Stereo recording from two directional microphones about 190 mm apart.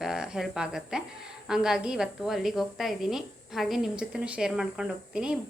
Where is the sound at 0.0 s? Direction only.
5° right (ahead or behind).